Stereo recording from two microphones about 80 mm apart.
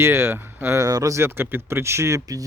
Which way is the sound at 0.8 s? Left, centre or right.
Right.